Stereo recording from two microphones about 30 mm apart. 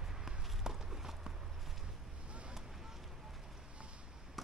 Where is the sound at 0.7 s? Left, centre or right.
Centre.